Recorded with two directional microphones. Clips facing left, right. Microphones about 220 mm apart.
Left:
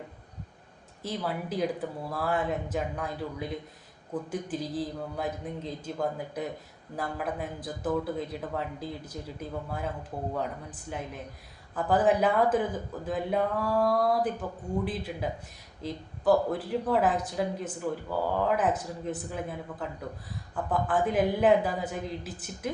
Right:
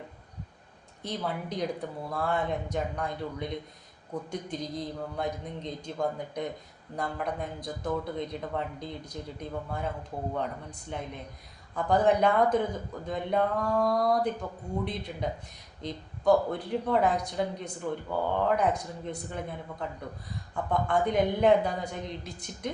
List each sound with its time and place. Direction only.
1.0 s speech: 5° left (ahead or behind)